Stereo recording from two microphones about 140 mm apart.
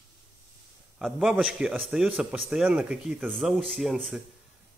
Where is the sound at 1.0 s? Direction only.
5° right (ahead or behind).